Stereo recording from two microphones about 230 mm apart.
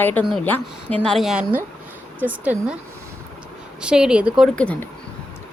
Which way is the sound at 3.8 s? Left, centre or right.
Centre.